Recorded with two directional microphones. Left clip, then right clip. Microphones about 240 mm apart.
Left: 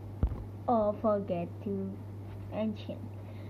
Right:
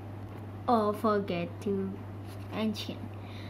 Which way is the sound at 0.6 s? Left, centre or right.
Right.